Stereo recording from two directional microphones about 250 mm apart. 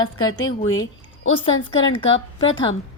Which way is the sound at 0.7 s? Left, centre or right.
Left.